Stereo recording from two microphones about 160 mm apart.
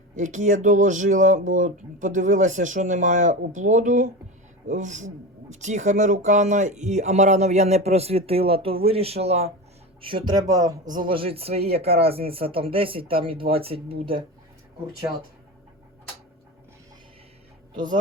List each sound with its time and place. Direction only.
0.2 s speech: 50° right (ahead or behind); by 10.8 s 20° right (ahead or behind)
10.9 s speech: 30° right (ahead or behind)